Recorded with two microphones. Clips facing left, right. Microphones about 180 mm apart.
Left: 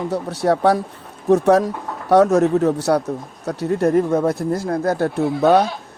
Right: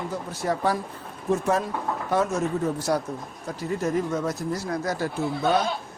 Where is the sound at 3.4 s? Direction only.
70° left (ahead or behind).